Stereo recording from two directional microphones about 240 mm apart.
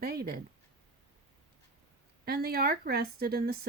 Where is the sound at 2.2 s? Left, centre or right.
Right.